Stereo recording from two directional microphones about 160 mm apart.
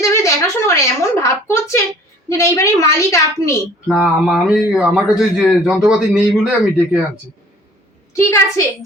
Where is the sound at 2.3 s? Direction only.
20° left (ahead or behind).